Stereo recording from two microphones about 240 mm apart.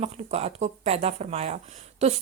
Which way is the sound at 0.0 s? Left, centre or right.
Right.